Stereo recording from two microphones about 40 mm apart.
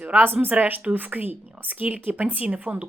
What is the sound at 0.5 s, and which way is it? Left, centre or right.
A woman's voice, right.